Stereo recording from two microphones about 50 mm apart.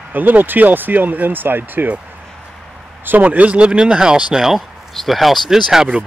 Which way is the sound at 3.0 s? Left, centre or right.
Right.